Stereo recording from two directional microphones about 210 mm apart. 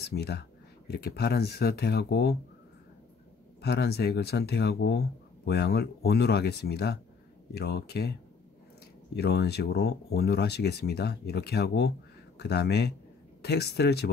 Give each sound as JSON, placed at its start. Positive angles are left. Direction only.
{"t": 0.0, "sound": "speech", "side_deg": 50}
{"t": 3.6, "sound": "speech", "side_deg": 50}
{"t": 9.1, "sound": "speech", "side_deg": 50}